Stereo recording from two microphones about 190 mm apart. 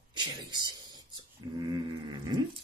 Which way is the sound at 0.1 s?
25° right (ahead or behind).